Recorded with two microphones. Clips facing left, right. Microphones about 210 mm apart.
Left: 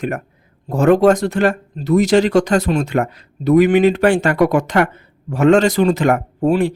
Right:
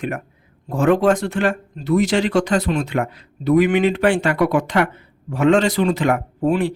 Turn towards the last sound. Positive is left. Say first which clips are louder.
# left 3 dB
turn(degrees=45)  # may be behind; listen again after turning